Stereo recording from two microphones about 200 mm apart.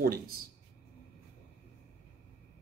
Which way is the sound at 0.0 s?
50° right (ahead or behind).